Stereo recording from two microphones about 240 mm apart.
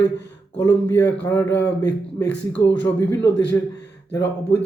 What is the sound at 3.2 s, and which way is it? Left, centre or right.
Speech, left.